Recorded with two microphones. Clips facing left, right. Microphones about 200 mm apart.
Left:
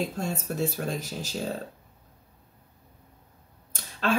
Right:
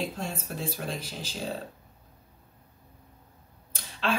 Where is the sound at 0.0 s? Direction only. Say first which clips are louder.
Left 3 dB; 40° left (ahead or behind).